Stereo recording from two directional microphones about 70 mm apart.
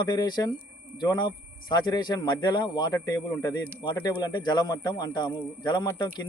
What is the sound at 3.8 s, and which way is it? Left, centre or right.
A man's voice, left.